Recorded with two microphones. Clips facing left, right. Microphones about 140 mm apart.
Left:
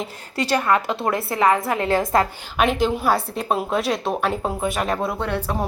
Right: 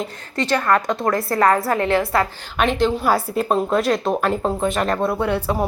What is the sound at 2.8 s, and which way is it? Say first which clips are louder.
Speech: right 2 dB; centre (ahead or behind).